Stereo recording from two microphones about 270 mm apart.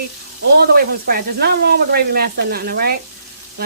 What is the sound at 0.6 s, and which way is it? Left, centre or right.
Sizzle, right.